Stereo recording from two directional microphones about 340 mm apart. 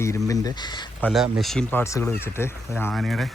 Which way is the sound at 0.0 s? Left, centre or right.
Centre.